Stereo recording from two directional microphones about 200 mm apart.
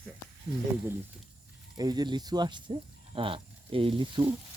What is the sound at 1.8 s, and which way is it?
Speech, 20° right (ahead or behind).